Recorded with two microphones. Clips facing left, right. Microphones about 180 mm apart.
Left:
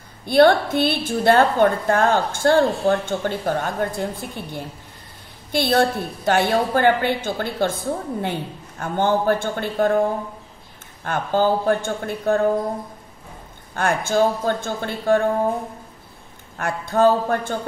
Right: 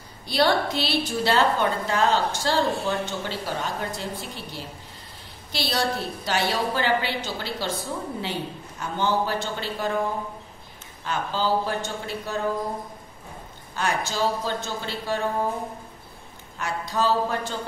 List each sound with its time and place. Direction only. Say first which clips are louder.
0.2 s a woman's voice: left 8 dB; 55° left (ahead or behind)
11.1 s a woman's voice: left 6 dB; 55° left (ahead or behind)
13.7 s a woman's voice: left 7 dB; 55° left (ahead or behind)
16.5 s a woman's voice: left 6 dB; 55° left (ahead or behind)